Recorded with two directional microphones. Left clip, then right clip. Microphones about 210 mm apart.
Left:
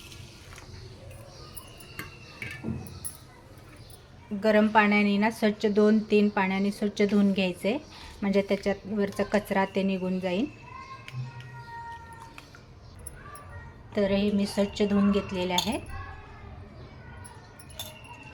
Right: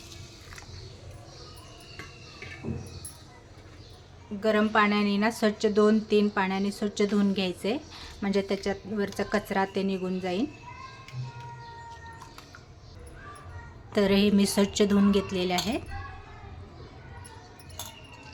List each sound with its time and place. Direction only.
4.4 s a woman's voice: 5° left (ahead or behind)
13.9 s speech: 25° right (ahead or behind)